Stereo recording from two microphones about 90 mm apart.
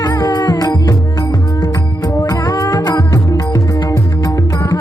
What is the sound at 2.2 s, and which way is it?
Music, 45° left (ahead or behind).